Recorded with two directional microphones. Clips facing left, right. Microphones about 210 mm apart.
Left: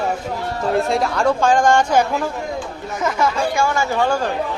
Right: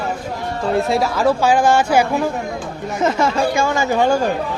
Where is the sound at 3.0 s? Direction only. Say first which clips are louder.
Right 3 dB; 25° right (ahead or behind).